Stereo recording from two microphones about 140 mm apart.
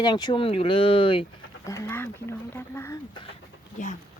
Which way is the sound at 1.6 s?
20° left (ahead or behind).